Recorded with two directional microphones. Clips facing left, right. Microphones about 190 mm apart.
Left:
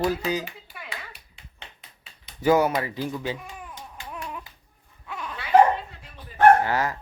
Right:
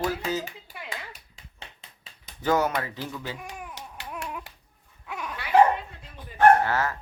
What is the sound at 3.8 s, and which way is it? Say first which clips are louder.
Babbling: even; 75° right (ahead or behind).